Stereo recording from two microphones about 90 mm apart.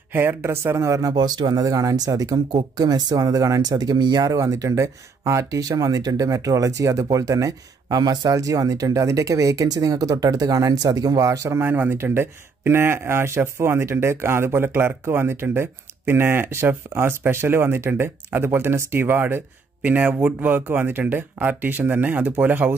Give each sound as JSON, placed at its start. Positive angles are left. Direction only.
{"t": 0.1, "sound": "speech", "side_deg": -25}